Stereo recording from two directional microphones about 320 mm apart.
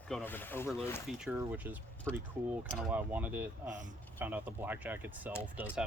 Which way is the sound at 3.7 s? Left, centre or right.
Right.